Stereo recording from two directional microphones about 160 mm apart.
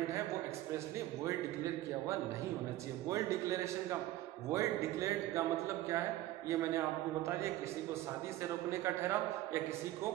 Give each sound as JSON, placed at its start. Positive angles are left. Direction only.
{"t": 1.2, "sound": "a man's voice", "side_deg": -20}
{"t": 6.5, "sound": "a man's voice", "side_deg": -20}
{"t": 8.6, "sound": "a man's voice", "side_deg": -15}